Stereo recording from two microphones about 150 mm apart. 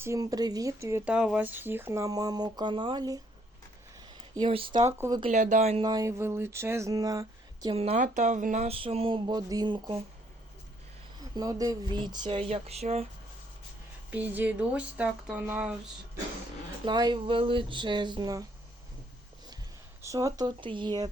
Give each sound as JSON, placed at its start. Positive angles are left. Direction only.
{"t": 0.0, "sound": "speech", "side_deg": -20}
{"t": 4.4, "sound": "speech", "side_deg": -35}
{"t": 4.9, "sound": "speech", "side_deg": -20}
{"t": 5.3, "sound": "speech", "side_deg": -50}
{"t": 5.8, "sound": "speech", "side_deg": -25}
{"t": 7.7, "sound": "speech", "side_deg": -40}
{"t": 8.6, "sound": "speech", "side_deg": -40}
{"t": 11.2, "sound": "speech", "side_deg": -25}
{"t": 14.1, "sound": "speech", "side_deg": -10}
{"t": 16.8, "sound": "speech", "side_deg": -30}
{"t": 20.0, "sound": "speech", "side_deg": -20}